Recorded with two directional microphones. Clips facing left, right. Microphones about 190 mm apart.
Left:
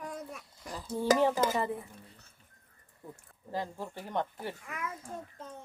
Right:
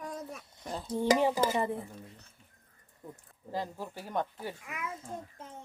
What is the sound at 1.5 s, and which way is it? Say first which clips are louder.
Speech: right 1 dB; 25° right (ahead or behind).